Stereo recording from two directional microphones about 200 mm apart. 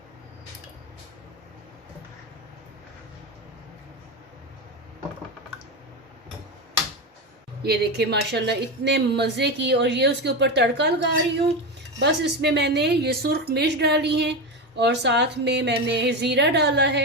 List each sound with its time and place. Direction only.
7.6 s a woman's voice: 55° right (ahead or behind)